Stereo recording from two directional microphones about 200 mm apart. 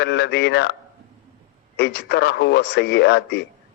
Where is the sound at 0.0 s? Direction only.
60° left (ahead or behind).